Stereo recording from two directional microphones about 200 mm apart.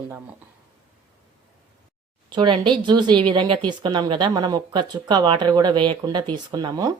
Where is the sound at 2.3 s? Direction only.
25° right (ahead or behind).